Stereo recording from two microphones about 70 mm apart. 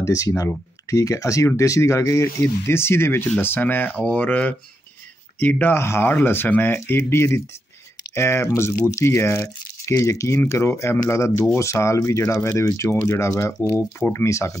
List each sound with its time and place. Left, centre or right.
0.0 s speech: left
2.4 s speech: left
13.7 s speech: left